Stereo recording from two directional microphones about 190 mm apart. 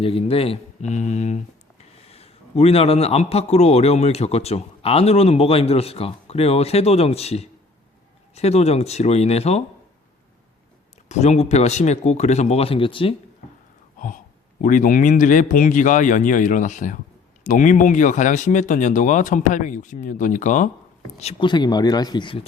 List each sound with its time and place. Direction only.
0.0 s a man's voice: 30° left (ahead or behind)
11.1 s a man's voice: 35° left (ahead or behind)
14.6 s a man's voice: 45° left (ahead or behind)
21.2 s speech: 30° left (ahead or behind)